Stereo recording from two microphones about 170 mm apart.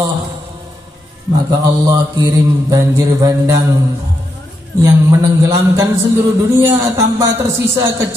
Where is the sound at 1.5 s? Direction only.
20° right (ahead or behind).